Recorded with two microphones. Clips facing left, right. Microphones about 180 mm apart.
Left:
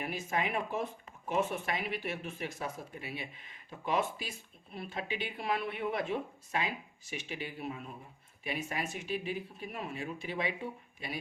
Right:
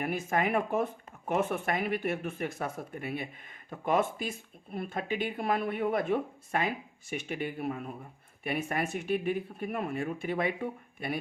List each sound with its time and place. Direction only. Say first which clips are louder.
0.0 s speech: right 5 dB; 50° right (ahead or behind)